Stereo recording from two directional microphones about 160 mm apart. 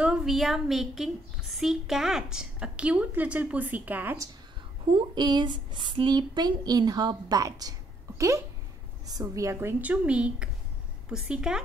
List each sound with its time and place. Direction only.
0.0 s a woman's voice: 5° right (ahead or behind)
4.9 s speech: 25° right (ahead or behind)
9.0 s a woman's voice: 20° right (ahead or behind); by 11.6 s 5° right (ahead or behind)